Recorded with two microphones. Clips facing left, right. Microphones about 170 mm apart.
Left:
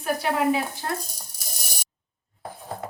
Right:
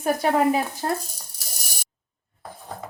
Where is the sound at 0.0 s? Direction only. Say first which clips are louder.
Right 3 dB; 45° right (ahead or behind).